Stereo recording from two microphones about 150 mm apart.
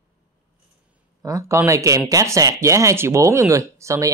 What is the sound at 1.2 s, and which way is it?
Speech, 20° right (ahead or behind).